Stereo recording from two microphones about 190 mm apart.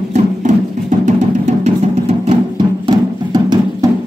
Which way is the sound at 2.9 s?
20° right (ahead or behind).